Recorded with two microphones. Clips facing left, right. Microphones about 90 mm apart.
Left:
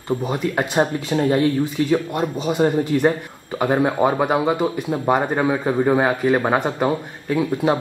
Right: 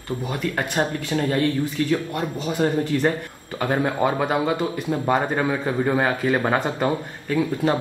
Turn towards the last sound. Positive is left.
turn(degrees=10)  # may be behind; listen again after turning